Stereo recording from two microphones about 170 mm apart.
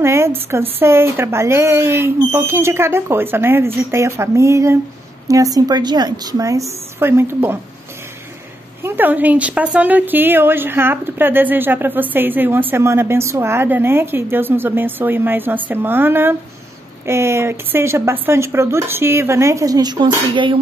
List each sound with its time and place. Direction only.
0.0 s a woman's voice: 15° right (ahead or behind)
8.8 s a woman's voice: 10° right (ahead or behind); by 20.5 s 30° right (ahead or behind)